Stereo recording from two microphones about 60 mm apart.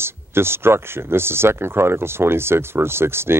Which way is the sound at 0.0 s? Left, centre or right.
Right.